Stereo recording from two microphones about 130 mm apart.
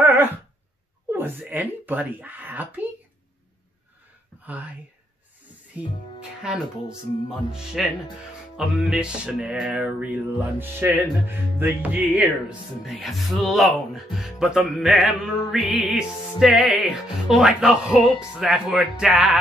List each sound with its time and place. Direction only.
0.0 s a sound: 15° right (ahead or behind)
1.5 s music: 15° right (ahead or behind)
5.7 s music: 10° right (ahead or behind)